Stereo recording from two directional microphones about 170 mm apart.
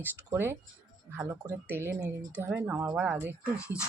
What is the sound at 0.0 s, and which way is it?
Speech, 10° right (ahead or behind).